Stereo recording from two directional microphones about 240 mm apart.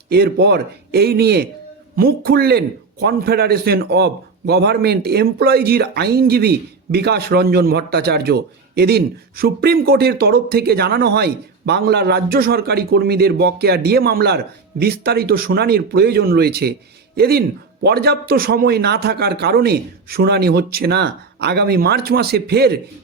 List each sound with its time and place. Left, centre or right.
0.1 s a man's voice: right